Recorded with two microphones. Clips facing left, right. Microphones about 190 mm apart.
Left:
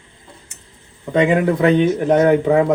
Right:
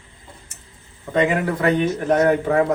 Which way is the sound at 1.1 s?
15° left (ahead or behind).